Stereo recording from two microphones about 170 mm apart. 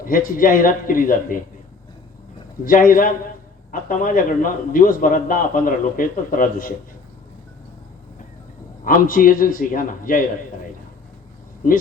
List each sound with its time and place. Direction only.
0.0 s a man's voice: 55° left (ahead or behind)
2.6 s a man's voice: 55° left (ahead or behind)
8.8 s a man's voice: 55° left (ahead or behind)